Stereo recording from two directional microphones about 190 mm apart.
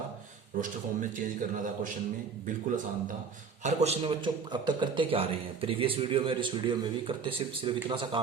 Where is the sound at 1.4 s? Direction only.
45° right (ahead or behind).